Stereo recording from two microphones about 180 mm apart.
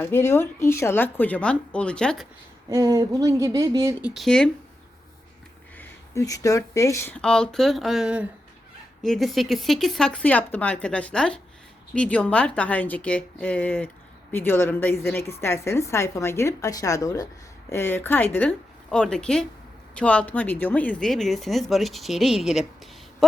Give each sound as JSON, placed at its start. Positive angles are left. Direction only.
{"t": 0.0, "sound": "a woman's voice", "side_deg": 15}
{"t": 2.6, "sound": "speech", "side_deg": -20}
{"t": 4.0, "sound": "speech", "side_deg": 0}
{"t": 5.7, "sound": "a woman's voice", "side_deg": 15}